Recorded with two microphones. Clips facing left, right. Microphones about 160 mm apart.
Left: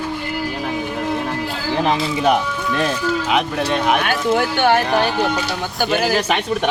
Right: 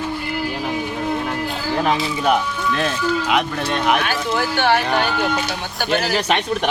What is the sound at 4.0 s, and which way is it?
Speech, 55° left (ahead or behind).